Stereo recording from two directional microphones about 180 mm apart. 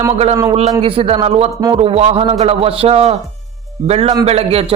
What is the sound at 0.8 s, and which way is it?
A man's voice, 30° right (ahead or behind).